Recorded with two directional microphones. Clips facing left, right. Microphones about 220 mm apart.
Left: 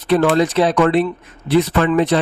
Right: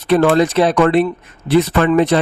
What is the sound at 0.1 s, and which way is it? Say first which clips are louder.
A man's voice: right 2 dB; 55° right (ahead or behind).